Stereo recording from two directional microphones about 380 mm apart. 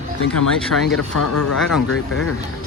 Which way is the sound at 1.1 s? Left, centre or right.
Left.